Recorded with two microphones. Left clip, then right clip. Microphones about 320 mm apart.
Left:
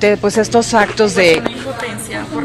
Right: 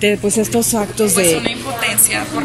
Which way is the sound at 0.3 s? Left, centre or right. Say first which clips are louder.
Left 5 dB; centre.